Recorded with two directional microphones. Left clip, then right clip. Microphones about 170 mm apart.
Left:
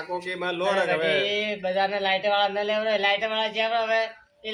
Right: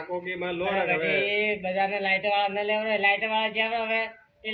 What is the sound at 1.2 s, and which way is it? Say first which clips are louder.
Speech: even; 40° left (ahead or behind).